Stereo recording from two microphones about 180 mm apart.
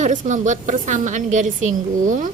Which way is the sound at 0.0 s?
45° right (ahead or behind).